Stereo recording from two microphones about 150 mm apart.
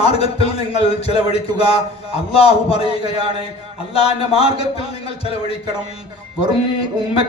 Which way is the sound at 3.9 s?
40° left (ahead or behind).